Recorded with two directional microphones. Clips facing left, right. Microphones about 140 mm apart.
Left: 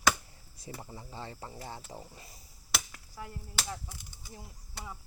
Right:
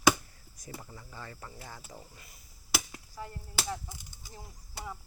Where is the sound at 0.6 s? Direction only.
25° left (ahead or behind).